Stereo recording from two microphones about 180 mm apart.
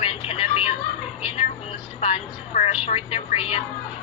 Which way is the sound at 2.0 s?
35° left (ahead or behind).